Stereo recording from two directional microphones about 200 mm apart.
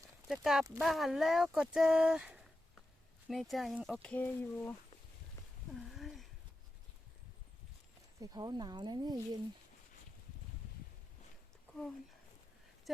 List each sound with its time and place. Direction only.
0.3 s speech: centre (ahead or behind)
4.0 s speech: 5° left (ahead or behind)
5.7 s a sound: centre (ahead or behind)
8.2 s speech: 20° right (ahead or behind)